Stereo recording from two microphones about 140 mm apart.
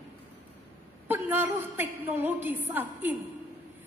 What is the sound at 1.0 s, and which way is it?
Speech, 15° right (ahead or behind).